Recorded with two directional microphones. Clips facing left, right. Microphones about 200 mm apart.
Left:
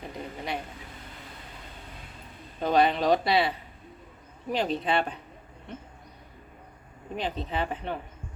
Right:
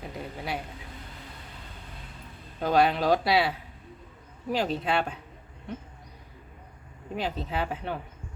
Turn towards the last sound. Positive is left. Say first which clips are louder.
# even
turn(degrees=-5)  # may be behind; listen again after turning